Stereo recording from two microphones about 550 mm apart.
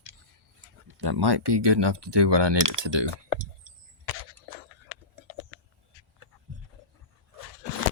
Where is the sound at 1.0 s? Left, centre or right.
Right.